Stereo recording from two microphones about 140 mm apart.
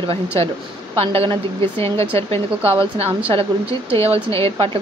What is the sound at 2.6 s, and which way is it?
A woman's voice, 40° right (ahead or behind).